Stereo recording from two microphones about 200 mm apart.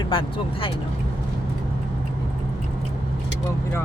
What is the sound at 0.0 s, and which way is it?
Speech, 25° left (ahead or behind).